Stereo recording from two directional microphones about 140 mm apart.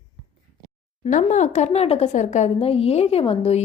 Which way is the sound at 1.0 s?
60° left (ahead or behind).